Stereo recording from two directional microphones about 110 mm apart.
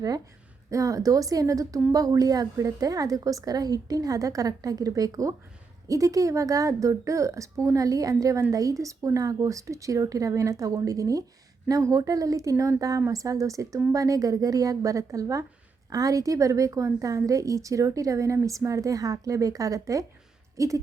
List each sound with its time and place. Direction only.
0.7 s a woman's voice: 30° right (ahead or behind)